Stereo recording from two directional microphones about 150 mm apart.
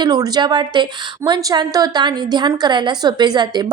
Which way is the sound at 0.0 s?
25° right (ahead or behind).